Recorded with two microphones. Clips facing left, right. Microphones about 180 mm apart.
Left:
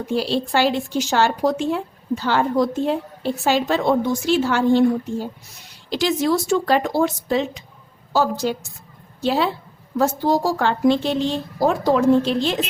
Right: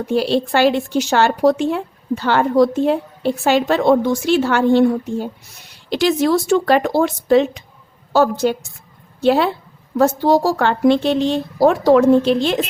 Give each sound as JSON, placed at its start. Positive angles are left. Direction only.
{"t": 0.1, "sound": "speech", "side_deg": -60}